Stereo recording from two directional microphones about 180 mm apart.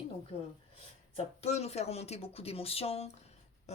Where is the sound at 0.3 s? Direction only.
30° left (ahead or behind).